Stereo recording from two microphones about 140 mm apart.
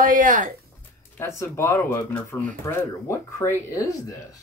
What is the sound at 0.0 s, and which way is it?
Speech, 70° right (ahead or behind).